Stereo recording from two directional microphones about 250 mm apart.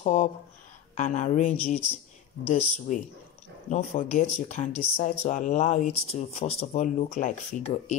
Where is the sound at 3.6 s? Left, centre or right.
Left.